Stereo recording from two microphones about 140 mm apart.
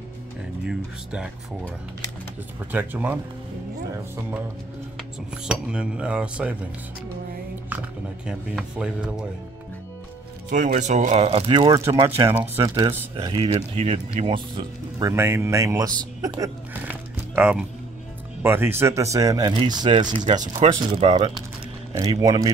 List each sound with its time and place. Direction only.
0.7 s cutlery: 5° right (ahead or behind)
2.7 s cutlery: 15° right (ahead or behind)
5.5 s cutlery: 5° right (ahead or behind)
7.7 s cutlery: 10° right (ahead or behind)
8.3 s speech: 5° right (ahead or behind)
10.5 s speech: 65° right (ahead or behind); by 15.0 s 35° right (ahead or behind)
15.0 s speech: 20° right (ahead or behind)
17.4 s cutlery: 5° right (ahead or behind)
18.4 s speech: 15° right (ahead or behind); by 20.2 s 30° right (ahead or behind)
20.8 s speech: 45° right (ahead or behind)
21.9 s speech: 25° right (ahead or behind)